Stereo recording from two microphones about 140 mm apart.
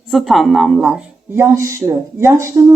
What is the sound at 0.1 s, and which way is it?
A woman's voice, centre (ahead or behind).